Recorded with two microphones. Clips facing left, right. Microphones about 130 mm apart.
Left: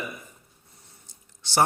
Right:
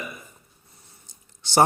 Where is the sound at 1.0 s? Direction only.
15° right (ahead or behind).